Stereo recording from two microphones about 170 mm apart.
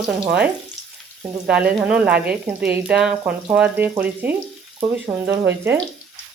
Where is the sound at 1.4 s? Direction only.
5° right (ahead or behind).